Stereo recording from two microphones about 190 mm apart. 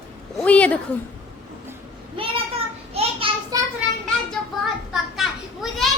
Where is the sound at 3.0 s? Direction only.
30° right (ahead or behind).